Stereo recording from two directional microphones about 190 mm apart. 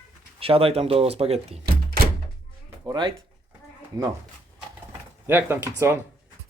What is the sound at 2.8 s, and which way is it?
Speech, 25° right (ahead or behind).